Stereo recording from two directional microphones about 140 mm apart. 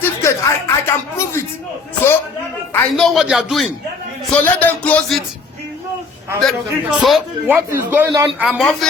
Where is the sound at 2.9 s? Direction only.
Centre (ahead or behind).